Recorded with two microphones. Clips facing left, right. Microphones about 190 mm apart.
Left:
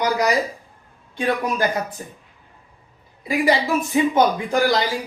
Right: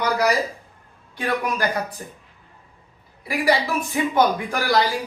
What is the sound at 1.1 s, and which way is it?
Speech, 20° left (ahead or behind).